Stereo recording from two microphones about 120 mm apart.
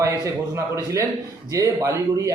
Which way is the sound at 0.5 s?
30° right (ahead or behind).